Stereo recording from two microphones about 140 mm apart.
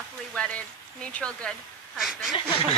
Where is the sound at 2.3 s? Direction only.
40° left (ahead or behind).